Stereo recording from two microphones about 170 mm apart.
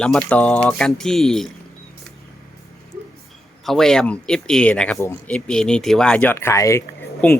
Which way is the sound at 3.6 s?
Centre (ahead or behind).